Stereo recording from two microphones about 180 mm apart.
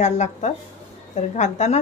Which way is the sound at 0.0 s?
40° left (ahead or behind).